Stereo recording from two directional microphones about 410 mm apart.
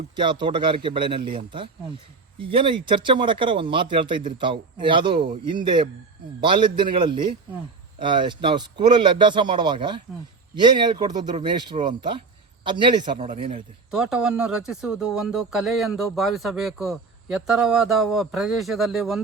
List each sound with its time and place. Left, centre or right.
0.2 s speech: centre
13.9 s speech: centre